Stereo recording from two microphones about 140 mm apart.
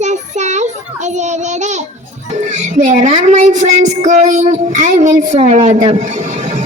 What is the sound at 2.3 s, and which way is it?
Music, 60° right (ahead or behind).